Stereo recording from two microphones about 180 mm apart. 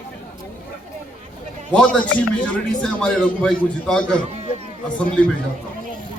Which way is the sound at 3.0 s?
5° left (ahead or behind).